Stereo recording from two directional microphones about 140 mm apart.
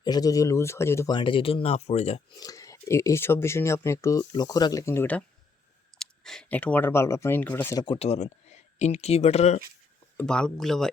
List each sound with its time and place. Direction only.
0.0 s speech: 30° left (ahead or behind)
1.1 s speech: 35° left (ahead or behind)
2.4 s speech: 25° left (ahead or behind)
6.0 s speech: 5° left (ahead or behind)
7.9 s speech: 50° left (ahead or behind)
10.2 s speech: 5° left (ahead or behind)